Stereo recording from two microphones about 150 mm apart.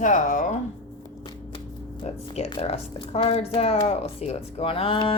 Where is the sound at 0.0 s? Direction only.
60° left (ahead or behind).